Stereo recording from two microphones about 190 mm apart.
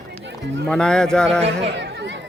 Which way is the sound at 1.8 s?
65° right (ahead or behind).